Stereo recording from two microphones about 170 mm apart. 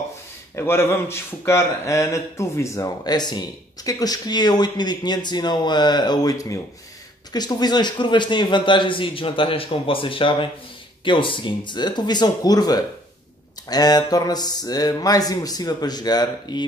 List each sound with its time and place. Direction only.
0.6 s a man's voice: 15° left (ahead or behind)